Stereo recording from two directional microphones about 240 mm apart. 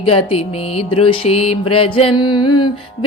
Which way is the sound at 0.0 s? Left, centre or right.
Left.